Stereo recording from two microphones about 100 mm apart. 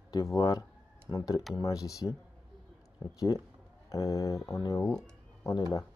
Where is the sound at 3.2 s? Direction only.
35° left (ahead or behind).